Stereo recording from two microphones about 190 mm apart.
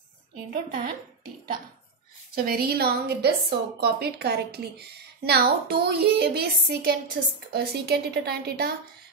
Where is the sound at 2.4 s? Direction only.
55° right (ahead or behind).